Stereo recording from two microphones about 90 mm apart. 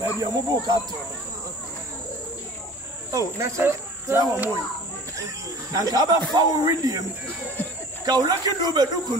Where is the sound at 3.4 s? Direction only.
30° right (ahead or behind).